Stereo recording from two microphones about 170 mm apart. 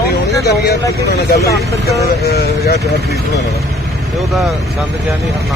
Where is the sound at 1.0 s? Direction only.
65° left (ahead or behind).